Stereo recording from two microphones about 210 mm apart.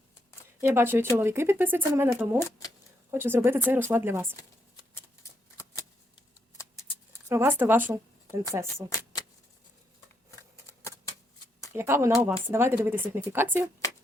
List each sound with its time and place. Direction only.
0.6 s speech: 10° right (ahead or behind)
3.1 s speech: 10° right (ahead or behind)
7.3 s speech: 10° right (ahead or behind)
8.9 s typewriter: 15° left (ahead or behind)
11.7 s speech: 10° right (ahead or behind)